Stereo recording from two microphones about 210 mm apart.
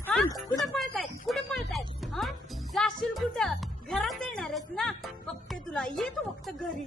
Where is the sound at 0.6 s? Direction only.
Centre (ahead or behind).